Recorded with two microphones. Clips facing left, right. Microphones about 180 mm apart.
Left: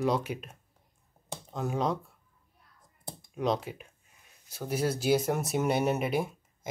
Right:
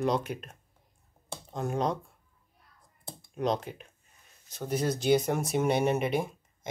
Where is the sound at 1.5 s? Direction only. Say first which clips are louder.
Even; centre (ahead or behind).